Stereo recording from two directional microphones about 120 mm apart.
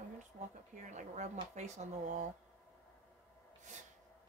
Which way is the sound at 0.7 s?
90° right.